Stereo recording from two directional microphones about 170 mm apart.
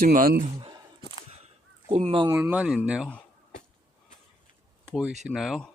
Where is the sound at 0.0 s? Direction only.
55° right (ahead or behind).